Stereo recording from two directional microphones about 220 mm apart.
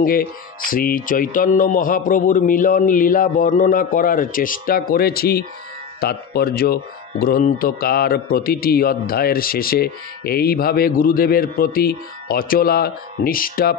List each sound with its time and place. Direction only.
0.0 s speech: 40° left (ahead or behind)